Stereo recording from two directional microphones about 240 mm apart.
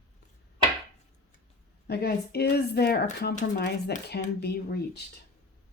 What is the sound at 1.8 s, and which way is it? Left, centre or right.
Speech, left.